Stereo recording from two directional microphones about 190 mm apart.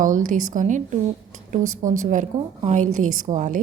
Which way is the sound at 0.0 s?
45° right (ahead or behind).